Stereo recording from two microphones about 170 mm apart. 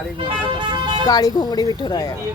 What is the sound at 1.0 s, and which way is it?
Speech, 20° left (ahead or behind).